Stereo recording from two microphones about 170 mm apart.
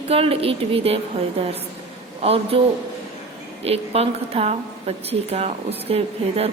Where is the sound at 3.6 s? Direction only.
35° right (ahead or behind).